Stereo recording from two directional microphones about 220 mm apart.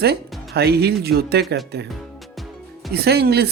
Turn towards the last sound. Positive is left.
turn(degrees=-45)  # may be behind; listen again after turning